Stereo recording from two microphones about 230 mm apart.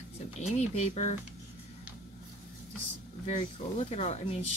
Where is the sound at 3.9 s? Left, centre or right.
Left.